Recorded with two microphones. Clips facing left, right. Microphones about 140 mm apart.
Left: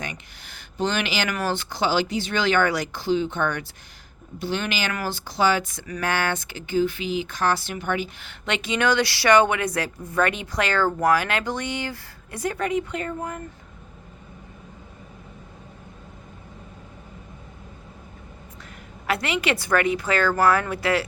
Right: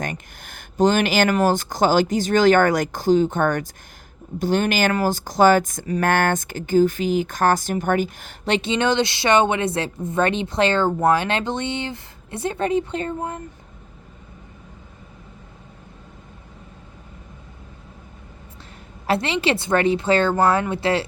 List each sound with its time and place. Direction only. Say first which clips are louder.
0.0 s speech: right 6 dB; 50° right (ahead or behind); by 13.4 s 25° right (ahead or behind)
19.0 s speech: right 4 dB; 30° right (ahead or behind)